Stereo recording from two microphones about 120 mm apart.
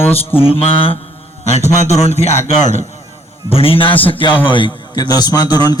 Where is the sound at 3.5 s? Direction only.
50° left (ahead or behind).